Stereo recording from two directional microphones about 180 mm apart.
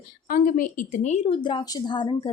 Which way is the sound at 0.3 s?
50° left (ahead or behind).